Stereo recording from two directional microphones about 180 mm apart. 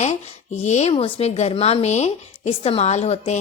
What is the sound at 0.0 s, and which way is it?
A woman's voice, 40° left (ahead or behind).